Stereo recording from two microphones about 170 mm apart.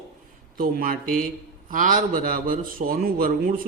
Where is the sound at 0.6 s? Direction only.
60° right (ahead or behind).